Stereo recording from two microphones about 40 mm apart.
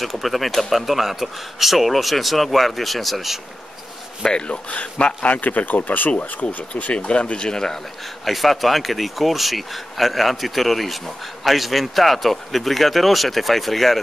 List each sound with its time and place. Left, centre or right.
0.0 s speech: centre
4.2 s speech: left
5.3 s speech: left
6.4 s speech: left
8.3 s speech: centre